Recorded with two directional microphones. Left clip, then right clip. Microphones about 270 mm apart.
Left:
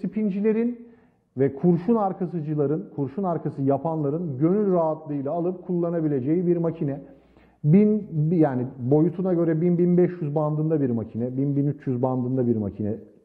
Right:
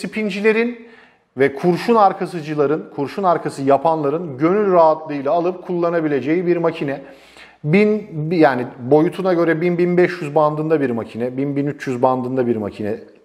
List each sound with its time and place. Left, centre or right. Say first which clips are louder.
0.0 s a man's voice: right 7 dB; centre
12.2 s a man's voice: right 6 dB; right
12.4 s a man's voice: right 6 dB; centre